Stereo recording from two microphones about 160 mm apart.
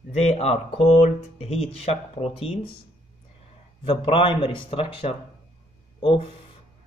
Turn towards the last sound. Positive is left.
turn(degrees=35)  # may be behind; listen again after turning